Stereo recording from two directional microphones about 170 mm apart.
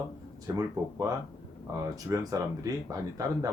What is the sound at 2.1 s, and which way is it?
Speech, 15° right (ahead or behind).